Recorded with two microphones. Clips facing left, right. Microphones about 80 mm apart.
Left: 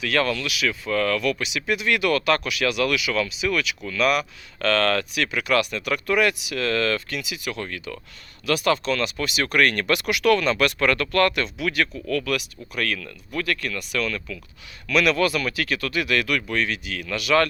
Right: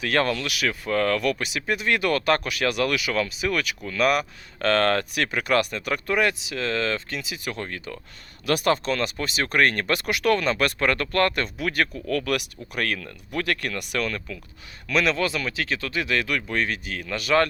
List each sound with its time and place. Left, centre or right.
0.0 s speech: right
0.4 s speech: right
0.9 s speech: right
8.4 s speech: right
11.4 s speech: right
13.3 s speech: right
14.0 s speech: right